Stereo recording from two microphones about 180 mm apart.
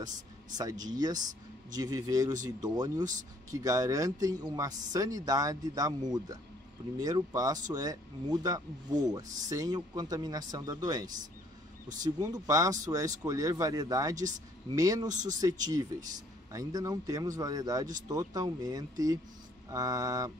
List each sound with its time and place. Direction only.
0.6 s speech: 20° right (ahead or behind)